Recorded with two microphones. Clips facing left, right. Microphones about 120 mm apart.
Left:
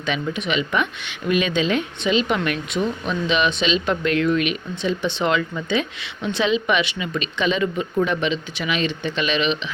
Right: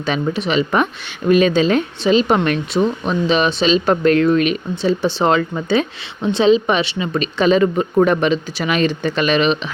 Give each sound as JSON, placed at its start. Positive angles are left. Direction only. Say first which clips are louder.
{"t": 0.3, "sound": "a woman's voice", "louder": "right 6 dB", "side_deg": -35}